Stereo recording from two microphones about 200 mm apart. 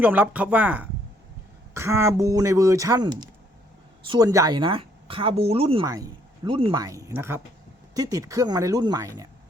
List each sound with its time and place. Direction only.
0.0 s speech: 10° right (ahead or behind); by 5.8 s 30° right (ahead or behind)
5.8 s speech: 15° right (ahead or behind)